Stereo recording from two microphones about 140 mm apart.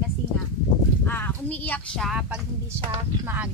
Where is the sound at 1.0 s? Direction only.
15° left (ahead or behind).